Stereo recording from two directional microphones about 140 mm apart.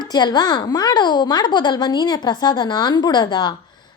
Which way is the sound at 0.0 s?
30° left (ahead or behind).